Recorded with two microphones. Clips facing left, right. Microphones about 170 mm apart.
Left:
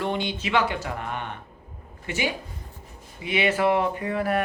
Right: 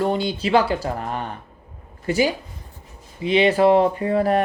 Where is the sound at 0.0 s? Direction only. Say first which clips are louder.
Right 6 dB; 35° right (ahead or behind).